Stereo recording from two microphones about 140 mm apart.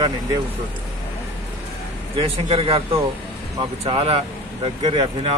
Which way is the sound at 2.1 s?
45° right (ahead or behind).